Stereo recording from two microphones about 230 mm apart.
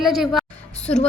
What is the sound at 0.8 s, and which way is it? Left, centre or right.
Speech, left.